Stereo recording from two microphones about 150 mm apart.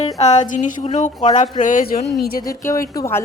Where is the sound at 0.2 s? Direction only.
50° left (ahead or behind); by 2.0 s 70° left (ahead or behind).